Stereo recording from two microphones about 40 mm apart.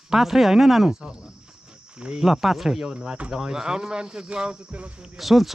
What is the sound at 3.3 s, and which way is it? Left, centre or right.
Speech, centre.